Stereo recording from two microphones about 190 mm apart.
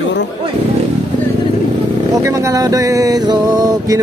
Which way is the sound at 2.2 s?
15° right (ahead or behind).